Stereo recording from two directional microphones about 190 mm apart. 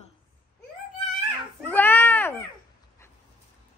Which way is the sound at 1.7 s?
10° left (ahead or behind).